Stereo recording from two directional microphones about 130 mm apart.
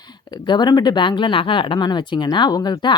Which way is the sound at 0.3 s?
35° left (ahead or behind).